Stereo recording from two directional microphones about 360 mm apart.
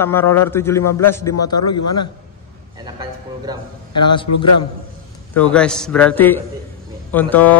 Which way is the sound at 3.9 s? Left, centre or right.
Centre.